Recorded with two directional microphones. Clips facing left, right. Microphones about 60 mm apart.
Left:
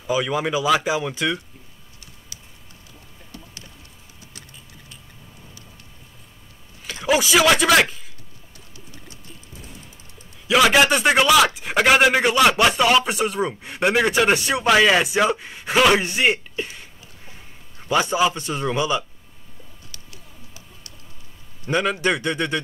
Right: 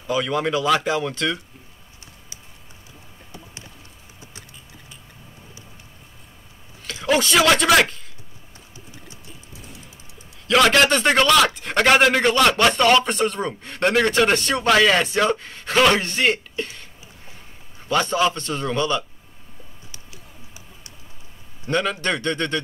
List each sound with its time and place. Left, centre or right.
0.0 s a man's voice: centre
4.2 s vehicle: right
6.8 s a man's voice: centre
10.4 s a man's voice: centre
17.8 s a man's voice: centre
21.6 s a man's voice: centre